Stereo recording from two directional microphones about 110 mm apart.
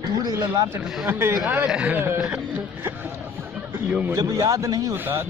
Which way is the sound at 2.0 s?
20° right (ahead or behind).